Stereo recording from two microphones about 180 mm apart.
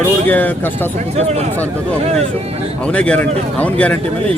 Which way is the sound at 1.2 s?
35° right (ahead or behind).